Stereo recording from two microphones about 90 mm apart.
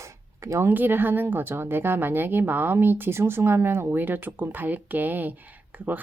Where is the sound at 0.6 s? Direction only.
20° right (ahead or behind).